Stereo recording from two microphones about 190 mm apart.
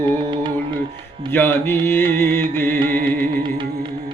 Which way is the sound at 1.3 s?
10° left (ahead or behind).